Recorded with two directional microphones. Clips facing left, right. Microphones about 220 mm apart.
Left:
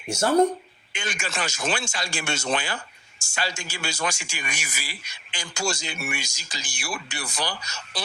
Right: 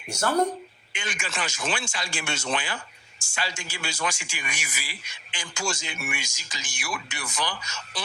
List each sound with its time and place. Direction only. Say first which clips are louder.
0.9 s speech: left 2 dB; 40° left (ahead or behind)